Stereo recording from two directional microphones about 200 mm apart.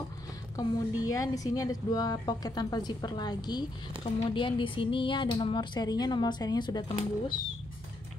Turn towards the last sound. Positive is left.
turn(degrees=20)  # may be behind; listen again after turning